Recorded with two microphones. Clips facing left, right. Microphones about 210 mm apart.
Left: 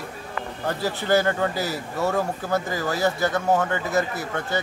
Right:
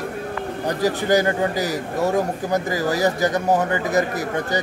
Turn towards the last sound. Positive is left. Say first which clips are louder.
# right 3 dB
turn(degrees=-15)  # may be behind; listen again after turning